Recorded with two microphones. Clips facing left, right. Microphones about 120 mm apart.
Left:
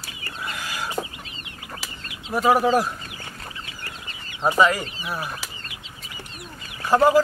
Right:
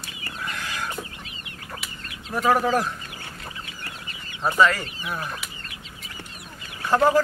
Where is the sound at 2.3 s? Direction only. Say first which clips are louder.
Left 2 dB; 10° left (ahead or behind).